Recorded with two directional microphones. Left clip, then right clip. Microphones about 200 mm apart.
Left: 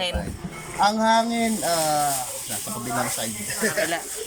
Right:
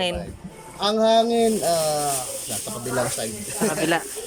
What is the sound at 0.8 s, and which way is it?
Speech, 20° right (ahead or behind).